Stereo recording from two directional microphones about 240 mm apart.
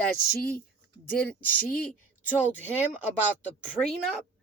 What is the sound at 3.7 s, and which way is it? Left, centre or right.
Speech, centre.